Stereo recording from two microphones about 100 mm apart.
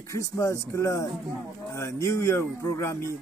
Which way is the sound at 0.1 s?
30° left (ahead or behind).